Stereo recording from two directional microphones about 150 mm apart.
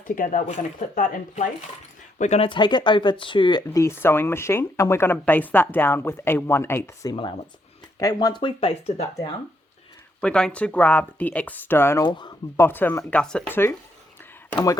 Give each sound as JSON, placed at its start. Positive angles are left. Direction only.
{"t": 0.2, "sound": "speech", "side_deg": 60}
{"t": 2.4, "sound": "speech", "side_deg": 30}
{"t": 10.2, "sound": "speech", "side_deg": 5}
{"t": 12.0, "sound": "speech", "side_deg": 30}
{"t": 12.5, "sound": "speech", "side_deg": 15}